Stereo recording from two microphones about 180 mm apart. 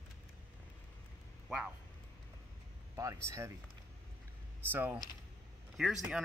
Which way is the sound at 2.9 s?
15° right (ahead or behind).